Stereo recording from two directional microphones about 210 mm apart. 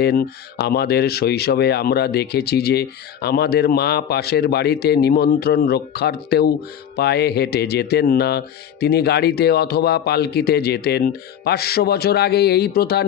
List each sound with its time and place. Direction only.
0.0 s speech: 45° left (ahead or behind)